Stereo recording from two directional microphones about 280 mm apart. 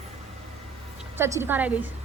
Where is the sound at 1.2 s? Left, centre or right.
Centre.